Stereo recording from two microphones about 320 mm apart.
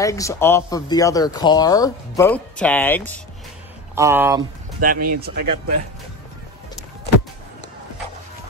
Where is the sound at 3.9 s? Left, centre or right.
Centre.